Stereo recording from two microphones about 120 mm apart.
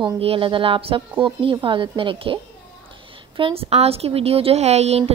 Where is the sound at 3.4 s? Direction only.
50° right (ahead or behind).